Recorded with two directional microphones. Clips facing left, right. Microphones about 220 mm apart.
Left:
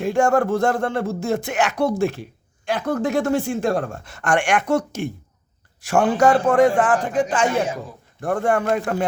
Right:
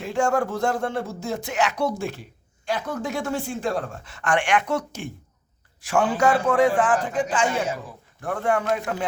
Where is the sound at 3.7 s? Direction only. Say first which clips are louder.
Left 5 dB; 45° left (ahead or behind).